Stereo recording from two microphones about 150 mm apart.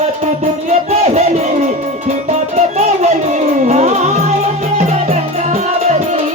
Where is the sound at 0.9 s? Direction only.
50° right (ahead or behind).